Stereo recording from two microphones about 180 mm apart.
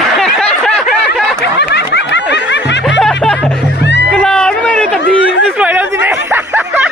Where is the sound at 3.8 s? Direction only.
80° left.